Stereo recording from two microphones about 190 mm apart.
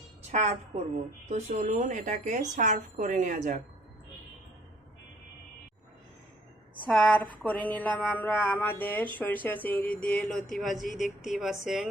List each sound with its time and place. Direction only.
0.3 s a woman's voice: 35° right (ahead or behind)
6.7 s speech: 5° left (ahead or behind)